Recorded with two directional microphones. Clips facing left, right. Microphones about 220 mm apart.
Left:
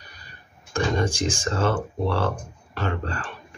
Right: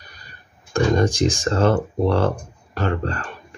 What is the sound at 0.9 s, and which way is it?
Speech, 40° right (ahead or behind).